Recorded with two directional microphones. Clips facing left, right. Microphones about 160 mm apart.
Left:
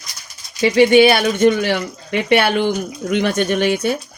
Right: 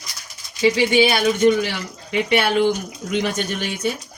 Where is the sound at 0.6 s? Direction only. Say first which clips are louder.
Left 6 dB; 60° left (ahead or behind).